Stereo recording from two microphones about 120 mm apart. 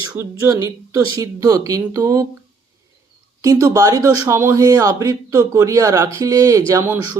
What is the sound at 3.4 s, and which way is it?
Speech, 30° right (ahead or behind).